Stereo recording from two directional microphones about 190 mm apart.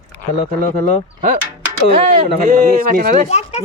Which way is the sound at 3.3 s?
35° left (ahead or behind).